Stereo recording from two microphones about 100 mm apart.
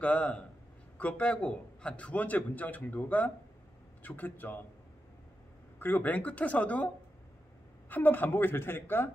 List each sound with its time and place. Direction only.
0.0 s a man's voice: 10° left (ahead or behind)
5.8 s a man's voice: 20° left (ahead or behind)
7.9 s speech: 20° left (ahead or behind)